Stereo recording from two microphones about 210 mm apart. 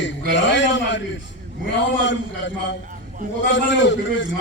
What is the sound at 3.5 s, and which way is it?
Speech, 60° left (ahead or behind).